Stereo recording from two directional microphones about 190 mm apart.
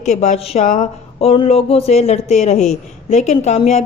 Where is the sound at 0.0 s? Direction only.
35° left (ahead or behind).